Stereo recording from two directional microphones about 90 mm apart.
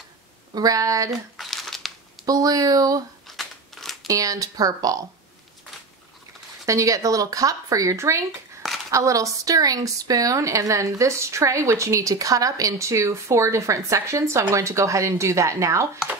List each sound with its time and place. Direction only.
0.6 s a woman's voice: 40° right (ahead or behind)
1.3 s crumpling: centre (ahead or behind)
2.2 s speech: 45° right (ahead or behind)
3.3 s scissors: centre (ahead or behind)
4.1 s a woman's voice: 40° right (ahead or behind)
6.6 s a woman's voice: 35° right (ahead or behind)